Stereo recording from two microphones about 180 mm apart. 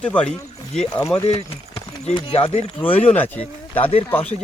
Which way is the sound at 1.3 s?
35° left (ahead or behind).